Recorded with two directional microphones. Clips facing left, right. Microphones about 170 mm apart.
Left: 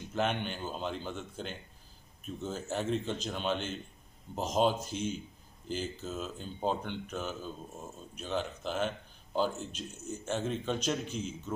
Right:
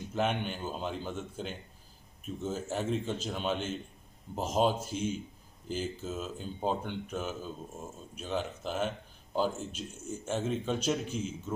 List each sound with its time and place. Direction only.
0.1 s speech: 5° right (ahead or behind)